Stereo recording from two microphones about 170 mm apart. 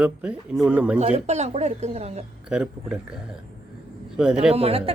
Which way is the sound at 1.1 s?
40° right (ahead or behind).